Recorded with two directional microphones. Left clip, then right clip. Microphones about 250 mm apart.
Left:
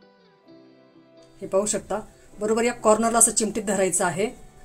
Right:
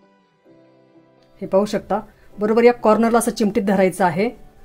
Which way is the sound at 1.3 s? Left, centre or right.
Right.